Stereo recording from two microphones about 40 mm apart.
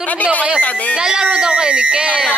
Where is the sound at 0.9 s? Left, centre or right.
Right.